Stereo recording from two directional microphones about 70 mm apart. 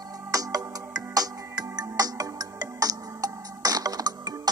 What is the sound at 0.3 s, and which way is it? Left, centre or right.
Music, right.